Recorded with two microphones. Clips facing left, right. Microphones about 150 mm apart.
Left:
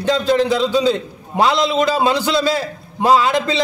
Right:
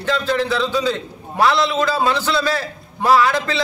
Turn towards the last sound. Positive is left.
turn(degrees=15)  # may be behind; listen again after turning